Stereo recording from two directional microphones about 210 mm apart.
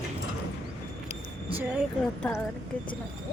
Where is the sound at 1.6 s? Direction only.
5° right (ahead or behind).